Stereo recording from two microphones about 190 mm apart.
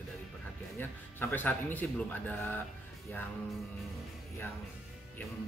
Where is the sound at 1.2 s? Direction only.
10° left (ahead or behind).